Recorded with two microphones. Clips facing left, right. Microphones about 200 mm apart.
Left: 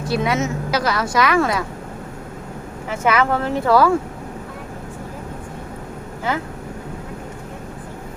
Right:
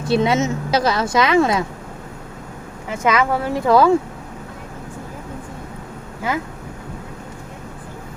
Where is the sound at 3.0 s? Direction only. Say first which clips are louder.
Even; 10° right (ahead or behind).